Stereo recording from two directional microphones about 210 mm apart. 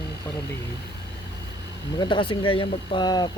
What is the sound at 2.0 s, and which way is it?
Speech, 25° left (ahead or behind).